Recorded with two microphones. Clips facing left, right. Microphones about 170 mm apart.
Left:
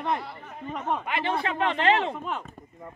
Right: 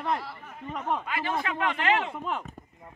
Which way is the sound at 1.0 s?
25° left (ahead or behind).